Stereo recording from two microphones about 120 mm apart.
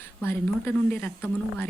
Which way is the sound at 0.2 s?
15° left (ahead or behind).